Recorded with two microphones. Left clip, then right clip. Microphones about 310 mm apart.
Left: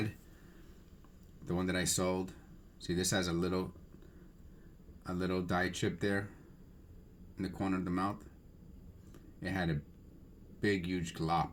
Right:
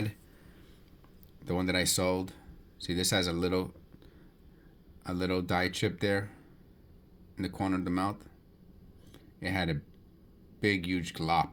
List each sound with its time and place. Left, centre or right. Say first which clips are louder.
1.5 s speech: right 5 dB; right
5.0 s speech: right 5 dB; right
7.3 s speech: right 4 dB; right
9.1 s a sound: right 5 dB; right
10.6 s speech: right 4 dB; right